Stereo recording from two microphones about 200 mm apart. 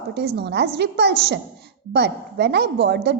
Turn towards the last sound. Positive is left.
turn(degrees=-60)  # may be behind; listen again after turning